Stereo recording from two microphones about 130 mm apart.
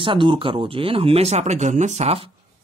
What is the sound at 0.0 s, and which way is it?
Speech, 40° right (ahead or behind).